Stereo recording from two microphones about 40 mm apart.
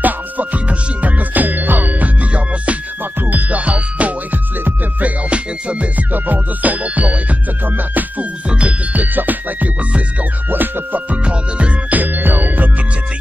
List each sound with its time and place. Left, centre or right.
0.0 s music: right
6.1 s music: right
8.5 s music: right
8.9 s music: right
11.1 s music: right
11.9 s music: right